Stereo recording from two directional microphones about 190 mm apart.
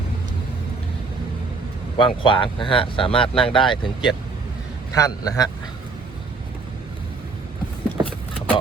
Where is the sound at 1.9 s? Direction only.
25° left (ahead or behind).